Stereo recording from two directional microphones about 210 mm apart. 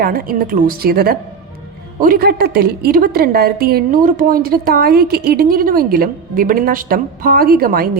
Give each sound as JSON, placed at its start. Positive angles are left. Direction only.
{"t": 0.0, "sound": "a woman's voice", "side_deg": -45}